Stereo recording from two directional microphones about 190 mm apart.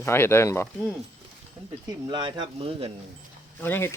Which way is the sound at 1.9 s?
25° right (ahead or behind).